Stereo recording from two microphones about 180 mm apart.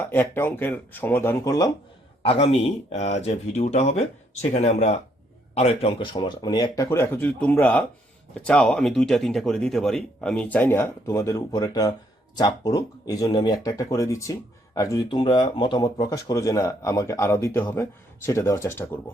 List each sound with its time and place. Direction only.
0.0 s speech: 10° left (ahead or behind)
2.2 s speech: 35° left (ahead or behind); by 19.1 s 10° left (ahead or behind)